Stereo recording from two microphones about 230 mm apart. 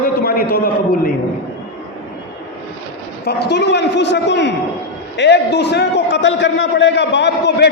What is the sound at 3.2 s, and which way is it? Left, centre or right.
A man's voice, left.